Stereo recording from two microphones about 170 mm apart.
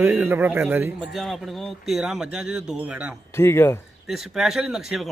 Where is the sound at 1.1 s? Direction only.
Centre (ahead or behind).